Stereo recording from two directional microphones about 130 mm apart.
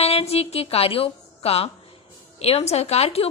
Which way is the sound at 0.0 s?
50° left (ahead or behind).